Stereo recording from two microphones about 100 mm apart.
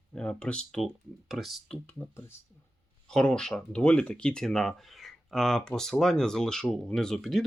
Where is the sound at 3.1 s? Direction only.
5° left (ahead or behind).